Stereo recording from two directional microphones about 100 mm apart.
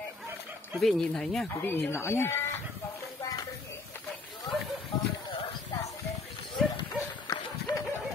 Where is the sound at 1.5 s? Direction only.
25° left (ahead or behind).